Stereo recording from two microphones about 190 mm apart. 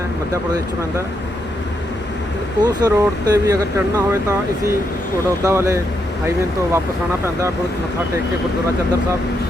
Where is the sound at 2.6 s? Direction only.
20° right (ahead or behind).